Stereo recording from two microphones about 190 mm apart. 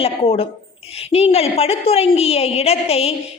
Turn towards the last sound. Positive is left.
turn(degrees=30)  # may be behind; listen again after turning